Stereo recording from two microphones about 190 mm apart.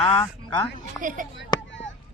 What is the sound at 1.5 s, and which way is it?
Chop, 20° left (ahead or behind).